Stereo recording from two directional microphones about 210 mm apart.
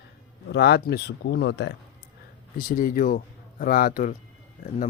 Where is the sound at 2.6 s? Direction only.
40° left (ahead or behind).